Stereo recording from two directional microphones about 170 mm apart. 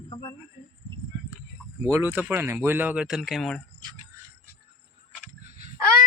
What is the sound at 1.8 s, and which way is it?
Speech, 10° right (ahead or behind).